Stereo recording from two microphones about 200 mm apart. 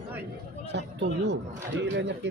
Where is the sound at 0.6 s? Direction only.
60° right (ahead or behind).